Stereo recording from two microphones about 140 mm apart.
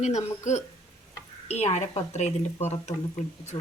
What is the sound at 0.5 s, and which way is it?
Speech, 60° left (ahead or behind).